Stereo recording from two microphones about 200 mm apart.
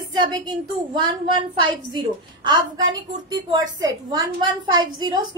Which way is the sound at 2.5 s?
75° right (ahead or behind).